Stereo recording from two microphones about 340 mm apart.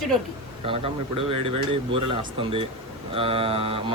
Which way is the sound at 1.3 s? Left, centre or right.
Centre.